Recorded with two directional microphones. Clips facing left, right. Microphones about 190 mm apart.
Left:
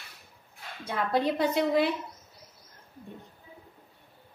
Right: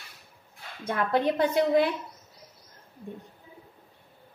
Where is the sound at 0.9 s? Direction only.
50° right (ahead or behind).